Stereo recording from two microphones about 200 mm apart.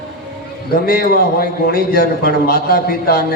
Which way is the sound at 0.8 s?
50° left (ahead or behind).